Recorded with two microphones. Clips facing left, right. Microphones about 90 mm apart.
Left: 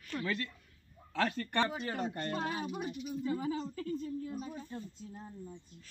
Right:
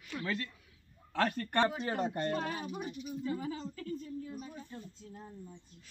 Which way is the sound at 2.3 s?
20° left (ahead or behind).